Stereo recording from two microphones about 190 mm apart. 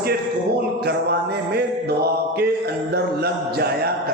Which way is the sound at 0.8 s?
55° right (ahead or behind).